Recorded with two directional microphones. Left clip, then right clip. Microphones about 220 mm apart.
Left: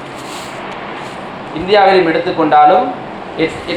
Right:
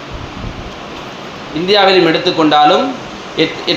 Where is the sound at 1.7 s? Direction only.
50° right (ahead or behind).